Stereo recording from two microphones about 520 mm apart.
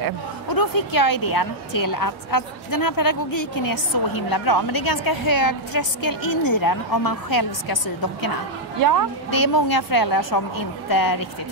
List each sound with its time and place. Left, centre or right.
0.5 s a woman's voice: left
9.3 s a woman's voice: left